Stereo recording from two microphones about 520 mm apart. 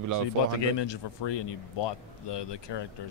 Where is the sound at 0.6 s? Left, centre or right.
Left.